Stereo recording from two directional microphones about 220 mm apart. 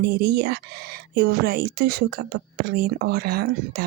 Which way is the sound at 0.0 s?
45° right (ahead or behind).